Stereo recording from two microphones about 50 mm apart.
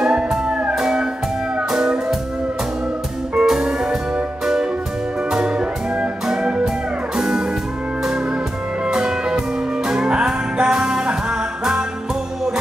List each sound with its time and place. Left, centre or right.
0.0 s music: centre
3.3 s music: centre
5.3 s music: centre
8.9 s music: centre